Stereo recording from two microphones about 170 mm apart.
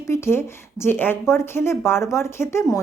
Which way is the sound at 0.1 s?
15° left (ahead or behind).